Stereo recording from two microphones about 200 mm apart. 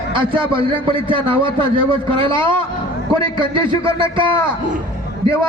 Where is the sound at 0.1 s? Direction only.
25° right (ahead or behind).